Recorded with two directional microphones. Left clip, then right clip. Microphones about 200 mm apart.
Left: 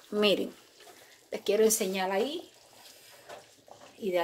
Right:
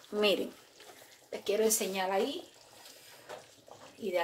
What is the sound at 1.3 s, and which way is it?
Speech, 55° left (ahead or behind).